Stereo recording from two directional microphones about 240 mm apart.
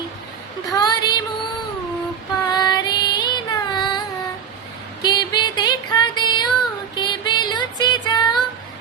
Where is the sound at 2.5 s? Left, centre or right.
Centre.